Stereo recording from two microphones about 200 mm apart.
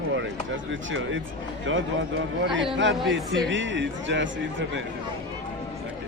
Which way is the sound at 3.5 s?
65° right (ahead or behind).